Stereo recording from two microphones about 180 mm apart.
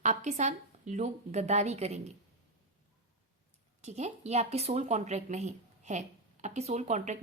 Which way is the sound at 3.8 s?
40° right (ahead or behind).